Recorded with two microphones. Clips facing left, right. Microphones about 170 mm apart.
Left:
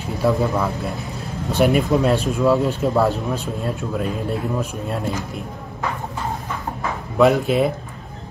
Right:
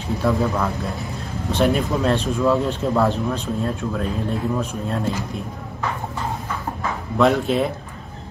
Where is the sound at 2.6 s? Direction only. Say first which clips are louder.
Left 1 dB; centre (ahead or behind).